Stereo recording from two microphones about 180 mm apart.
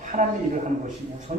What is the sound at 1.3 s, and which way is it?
Speech, 45° right (ahead or behind).